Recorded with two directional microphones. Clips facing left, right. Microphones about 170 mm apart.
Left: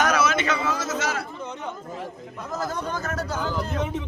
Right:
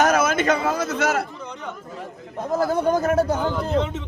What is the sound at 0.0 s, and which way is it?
A man's voice, 50° right (ahead or behind).